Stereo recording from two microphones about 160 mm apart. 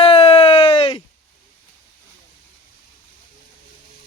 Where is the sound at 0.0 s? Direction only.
35° left (ahead or behind).